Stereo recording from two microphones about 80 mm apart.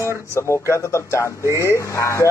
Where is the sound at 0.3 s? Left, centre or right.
Left.